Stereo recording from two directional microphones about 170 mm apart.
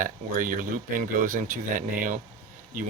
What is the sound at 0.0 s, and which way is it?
Speech, 55° right (ahead or behind).